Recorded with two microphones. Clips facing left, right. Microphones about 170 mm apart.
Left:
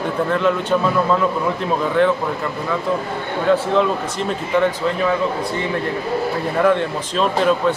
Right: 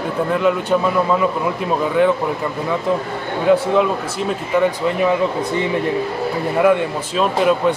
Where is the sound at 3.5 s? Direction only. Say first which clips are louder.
Right 2 dB; 10° right (ahead or behind).